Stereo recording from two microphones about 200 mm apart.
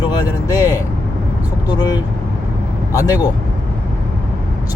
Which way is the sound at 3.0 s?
20° left (ahead or behind).